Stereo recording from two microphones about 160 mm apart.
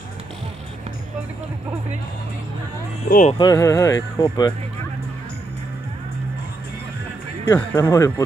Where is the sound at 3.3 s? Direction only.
20° left (ahead or behind).